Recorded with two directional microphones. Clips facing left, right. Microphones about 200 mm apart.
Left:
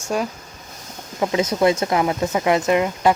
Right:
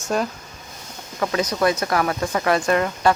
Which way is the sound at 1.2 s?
20° left (ahead or behind).